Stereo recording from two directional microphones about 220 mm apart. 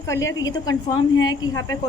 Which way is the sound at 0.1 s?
15° left (ahead or behind).